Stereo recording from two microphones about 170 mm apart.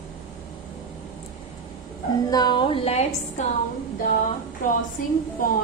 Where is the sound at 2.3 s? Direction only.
25° left (ahead or behind).